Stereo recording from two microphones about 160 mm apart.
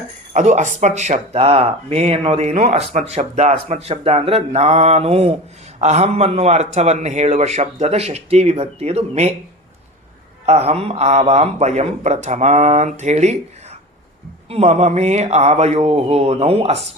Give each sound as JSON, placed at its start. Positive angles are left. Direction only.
{"t": 0.3, "sound": "a man's voice", "side_deg": -50}
{"t": 10.4, "sound": "a man's voice", "side_deg": -40}